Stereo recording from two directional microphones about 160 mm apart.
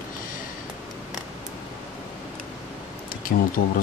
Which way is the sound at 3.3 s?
70° left (ahead or behind).